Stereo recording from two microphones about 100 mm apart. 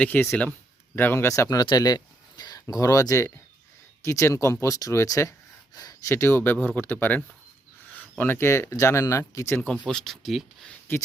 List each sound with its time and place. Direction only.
0.0 s speech: 20° left (ahead or behind)
9.8 s speech: 5° left (ahead or behind)
10.9 s speech: 20° left (ahead or behind)